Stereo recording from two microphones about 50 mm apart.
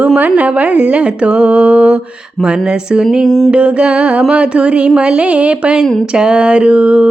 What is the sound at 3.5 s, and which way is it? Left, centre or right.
Music, right.